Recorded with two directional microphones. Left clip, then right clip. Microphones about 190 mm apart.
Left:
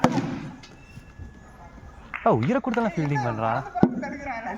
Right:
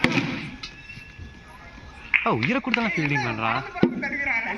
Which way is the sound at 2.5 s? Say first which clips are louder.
Right 1 dB; 75° left (ahead or behind).